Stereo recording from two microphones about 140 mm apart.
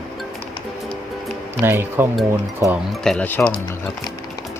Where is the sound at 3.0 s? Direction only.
10° left (ahead or behind).